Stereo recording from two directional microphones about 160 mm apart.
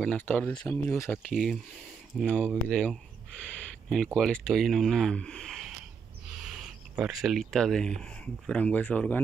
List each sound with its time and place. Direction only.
0.0 s speech: 10° left (ahead or behind)
1.3 s speech: centre (ahead or behind)